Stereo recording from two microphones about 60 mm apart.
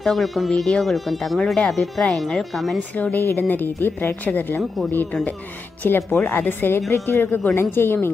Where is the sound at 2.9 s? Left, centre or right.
Left.